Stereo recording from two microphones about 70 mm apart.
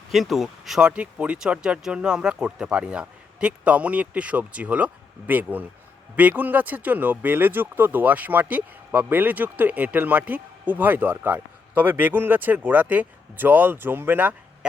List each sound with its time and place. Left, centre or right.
0.1 s speech: centre
0.8 s speech: centre